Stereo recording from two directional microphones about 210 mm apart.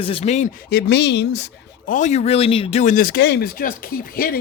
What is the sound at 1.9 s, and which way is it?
Speech, 35° left (ahead or behind).